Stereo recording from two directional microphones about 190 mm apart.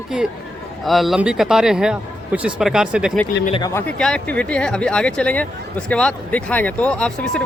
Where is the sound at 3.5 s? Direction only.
20° left (ahead or behind).